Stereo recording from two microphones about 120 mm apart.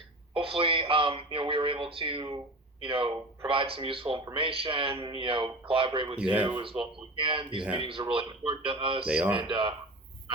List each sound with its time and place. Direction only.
0.3 s speech: 50° right (ahead or behind)
6.3 s speech: 10° right (ahead or behind)
7.2 s speech: 45° right (ahead or behind)
9.0 s speech: 10° right (ahead or behind)
9.3 s speech: 45° right (ahead or behind)